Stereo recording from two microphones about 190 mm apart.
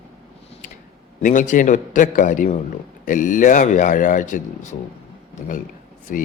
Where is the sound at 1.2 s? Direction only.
40° left (ahead or behind).